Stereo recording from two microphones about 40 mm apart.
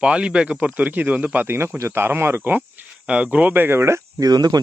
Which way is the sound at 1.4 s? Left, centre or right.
Right.